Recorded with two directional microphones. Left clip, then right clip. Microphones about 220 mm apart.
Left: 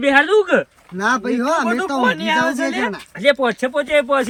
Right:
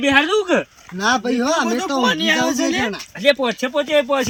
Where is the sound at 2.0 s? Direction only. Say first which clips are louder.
Even; 20° left (ahead or behind).